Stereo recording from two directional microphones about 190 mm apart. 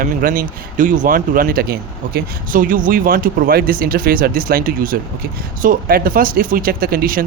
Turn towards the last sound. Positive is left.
turn(degrees=-50)  # may be behind; listen again after turning